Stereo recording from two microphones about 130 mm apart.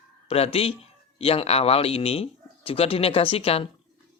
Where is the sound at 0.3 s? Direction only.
50° left (ahead or behind).